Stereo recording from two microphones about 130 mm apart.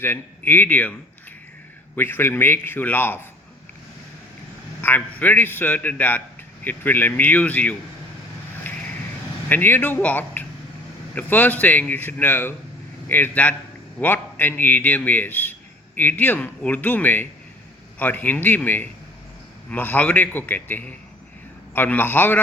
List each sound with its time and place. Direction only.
0.0 s a man's voice: 15° left (ahead or behind)
2.0 s a man's voice: 15° left (ahead or behind)
4.8 s a man's voice: 15° left (ahead or behind)
8.7 s a sound: 15° left (ahead or behind)
9.5 s a man's voice: 15° left (ahead or behind)